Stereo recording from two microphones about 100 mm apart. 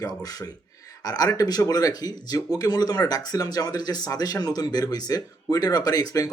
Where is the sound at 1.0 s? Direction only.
40° left (ahead or behind).